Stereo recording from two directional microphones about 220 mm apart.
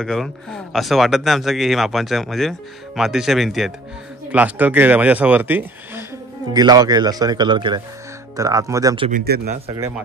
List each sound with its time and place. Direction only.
0.0 s speech: centre (ahead or behind); by 9.1 s 20° right (ahead or behind)
9.1 s speech: 45° right (ahead or behind)
9.7 s speech: 15° right (ahead or behind)